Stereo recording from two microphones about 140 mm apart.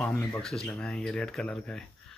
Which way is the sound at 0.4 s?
5° left (ahead or behind).